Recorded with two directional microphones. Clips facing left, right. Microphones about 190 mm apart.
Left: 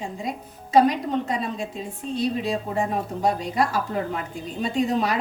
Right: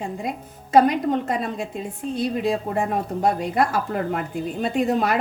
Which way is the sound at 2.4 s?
55° right (ahead or behind).